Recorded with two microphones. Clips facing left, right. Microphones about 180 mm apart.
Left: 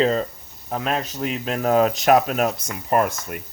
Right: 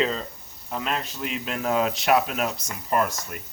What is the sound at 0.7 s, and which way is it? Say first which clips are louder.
Speech: left 4 dB; 45° left (ahead or behind).